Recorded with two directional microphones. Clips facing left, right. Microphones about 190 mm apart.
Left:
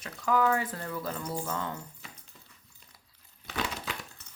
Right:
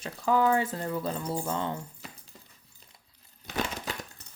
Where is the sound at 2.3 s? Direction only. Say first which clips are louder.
Right 3 dB; 40° right (ahead or behind).